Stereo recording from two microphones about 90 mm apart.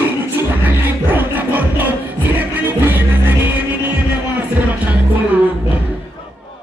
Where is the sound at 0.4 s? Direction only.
20° right (ahead or behind).